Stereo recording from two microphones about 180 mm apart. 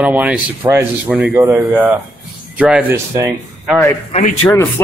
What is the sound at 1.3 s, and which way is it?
A man's voice, 10° right (ahead or behind).